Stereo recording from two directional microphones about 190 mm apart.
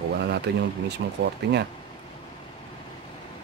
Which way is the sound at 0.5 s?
60° right (ahead or behind).